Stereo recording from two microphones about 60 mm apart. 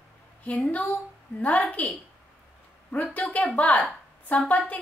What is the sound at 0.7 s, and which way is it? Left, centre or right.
A woman's voice, left.